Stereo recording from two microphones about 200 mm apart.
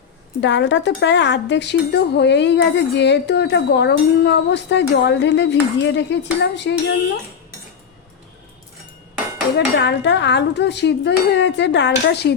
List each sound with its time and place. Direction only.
0.4 s speech: 65° left (ahead or behind)
9.6 s speech: 60° left (ahead or behind)